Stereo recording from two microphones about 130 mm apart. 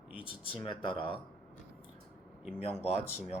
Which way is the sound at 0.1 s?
40° left (ahead or behind).